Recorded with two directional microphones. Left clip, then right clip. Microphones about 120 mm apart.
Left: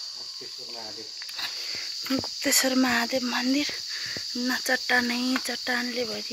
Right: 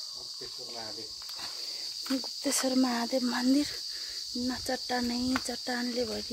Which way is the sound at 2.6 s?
5° right (ahead or behind).